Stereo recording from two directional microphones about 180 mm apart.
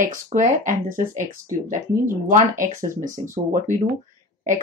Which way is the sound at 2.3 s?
45° right (ahead or behind).